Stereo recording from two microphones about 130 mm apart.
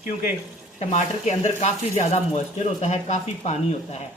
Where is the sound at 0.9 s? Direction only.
60° left (ahead or behind).